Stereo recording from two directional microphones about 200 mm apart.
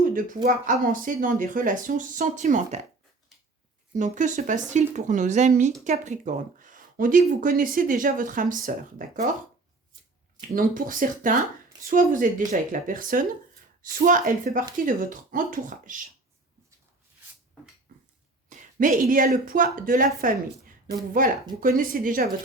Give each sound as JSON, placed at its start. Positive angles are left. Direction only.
{"t": 0.0, "sound": "a sound", "side_deg": -45}
{"t": 0.4, "sound": "speech", "side_deg": -45}
{"t": 3.9, "sound": "speech", "side_deg": -40}
{"t": 10.5, "sound": "speech", "side_deg": -45}
{"t": 18.4, "sound": "speech", "side_deg": -40}
{"t": 21.2, "sound": "speech", "side_deg": -45}